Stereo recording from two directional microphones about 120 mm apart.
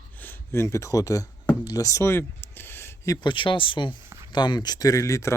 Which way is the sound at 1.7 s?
30° left (ahead or behind).